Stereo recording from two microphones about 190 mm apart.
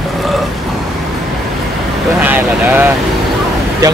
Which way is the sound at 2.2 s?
10° right (ahead or behind).